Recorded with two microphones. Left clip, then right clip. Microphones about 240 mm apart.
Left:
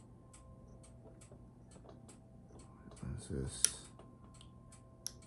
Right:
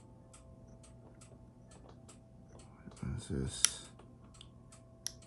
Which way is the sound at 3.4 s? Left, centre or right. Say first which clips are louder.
Right 4 dB; centre.